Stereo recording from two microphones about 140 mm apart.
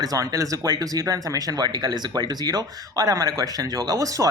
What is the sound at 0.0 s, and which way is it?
Speech, 25° right (ahead or behind).